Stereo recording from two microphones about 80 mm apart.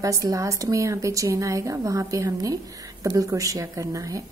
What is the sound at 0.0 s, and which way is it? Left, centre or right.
A woman's voice, right.